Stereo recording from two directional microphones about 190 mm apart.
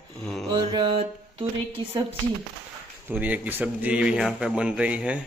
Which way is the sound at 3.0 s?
10° right (ahead or behind).